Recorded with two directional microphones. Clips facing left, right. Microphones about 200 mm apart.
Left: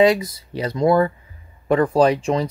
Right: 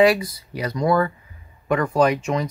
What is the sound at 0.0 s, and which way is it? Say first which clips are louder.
Speech: left 1 dB; 25° left (ahead or behind).